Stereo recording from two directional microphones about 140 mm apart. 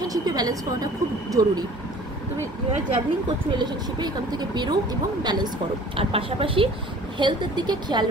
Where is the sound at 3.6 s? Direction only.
30° right (ahead or behind).